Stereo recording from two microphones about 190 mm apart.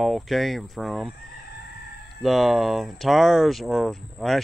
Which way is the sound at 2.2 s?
Centre (ahead or behind).